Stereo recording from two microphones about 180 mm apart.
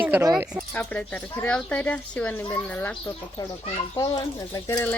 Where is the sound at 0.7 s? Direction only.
10° left (ahead or behind).